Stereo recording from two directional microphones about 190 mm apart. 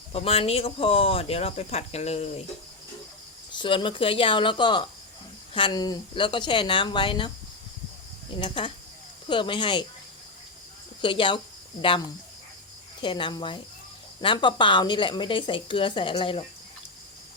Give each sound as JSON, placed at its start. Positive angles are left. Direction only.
{"t": 0.1, "sound": "speech", "side_deg": 30}
{"t": 3.5, "sound": "speech", "side_deg": 25}
{"t": 8.4, "sound": "speech", "side_deg": 25}
{"t": 11.0, "sound": "speech", "side_deg": 25}